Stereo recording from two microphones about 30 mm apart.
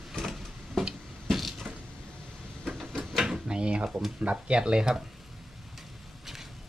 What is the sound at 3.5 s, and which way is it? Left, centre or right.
Drawer open or close, right.